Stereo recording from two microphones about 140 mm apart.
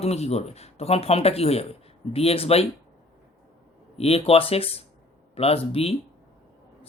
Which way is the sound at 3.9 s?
45° left (ahead or behind).